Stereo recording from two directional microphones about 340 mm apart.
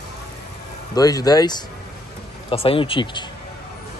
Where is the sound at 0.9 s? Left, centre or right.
Centre.